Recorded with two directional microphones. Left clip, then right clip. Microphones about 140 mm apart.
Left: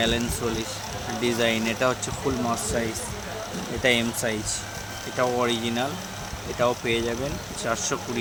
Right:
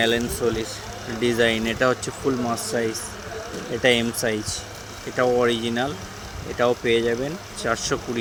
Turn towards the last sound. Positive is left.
turn(degrees=-20)  # may be behind; listen again after turning